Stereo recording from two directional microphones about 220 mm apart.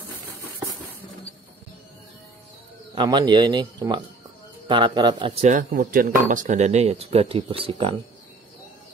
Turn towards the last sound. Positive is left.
turn(degrees=-25)  # may be behind; listen again after turning